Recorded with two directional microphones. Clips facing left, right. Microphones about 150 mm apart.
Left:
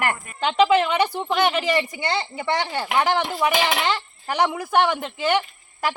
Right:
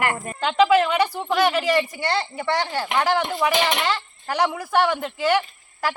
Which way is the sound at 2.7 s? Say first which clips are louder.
Left 1 dB; 5° left (ahead or behind).